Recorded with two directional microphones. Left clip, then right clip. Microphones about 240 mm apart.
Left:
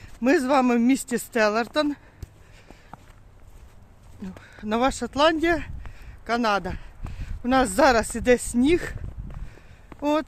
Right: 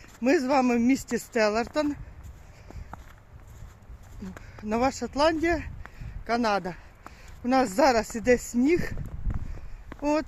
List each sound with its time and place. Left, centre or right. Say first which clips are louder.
0.0 s speech: left 3 dB; centre
4.6 s speech: left 3 dB; centre
10.0 s speech: left 3 dB; centre